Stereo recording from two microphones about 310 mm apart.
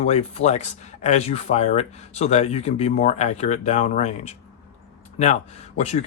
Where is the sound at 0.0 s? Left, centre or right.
Left.